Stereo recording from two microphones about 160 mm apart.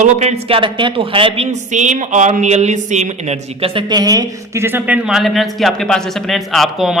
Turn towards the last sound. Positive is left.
turn(degrees=0)  # may be behind; listen again after turning